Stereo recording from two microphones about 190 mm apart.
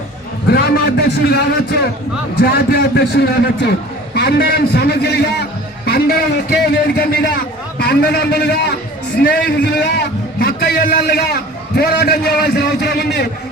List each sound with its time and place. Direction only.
0.5 s a man's voice: 55° left (ahead or behind)